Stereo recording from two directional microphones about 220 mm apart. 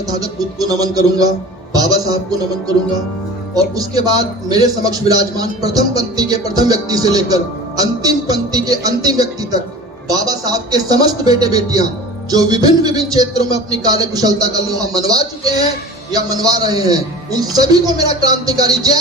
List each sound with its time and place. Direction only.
0.1 s a man's voice: 15° right (ahead or behind)
1.7 s music: 15° right (ahead or behind)
3.5 s a man's voice: 15° right (ahead or behind)